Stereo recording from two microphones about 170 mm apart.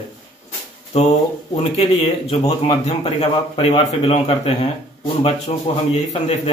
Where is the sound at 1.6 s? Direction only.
35° left (ahead or behind).